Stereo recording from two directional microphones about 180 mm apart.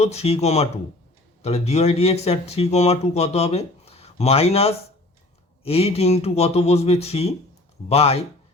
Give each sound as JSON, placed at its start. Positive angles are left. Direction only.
{"t": 0.0, "sound": "speech", "side_deg": 35}